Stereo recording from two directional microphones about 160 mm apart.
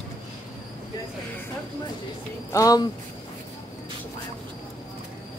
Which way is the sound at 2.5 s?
20° left (ahead or behind).